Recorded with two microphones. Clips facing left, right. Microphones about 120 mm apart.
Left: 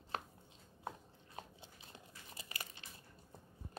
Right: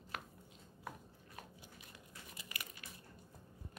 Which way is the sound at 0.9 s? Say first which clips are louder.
Left 3 dB; 25° left (ahead or behind).